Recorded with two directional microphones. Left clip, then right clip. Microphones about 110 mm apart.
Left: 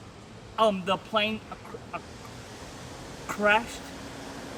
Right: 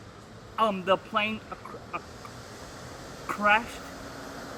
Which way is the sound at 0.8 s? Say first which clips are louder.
Right 1 dB; 50° left (ahead or behind).